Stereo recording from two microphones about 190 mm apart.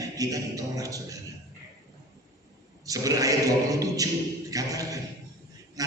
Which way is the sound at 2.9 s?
20° right (ahead or behind).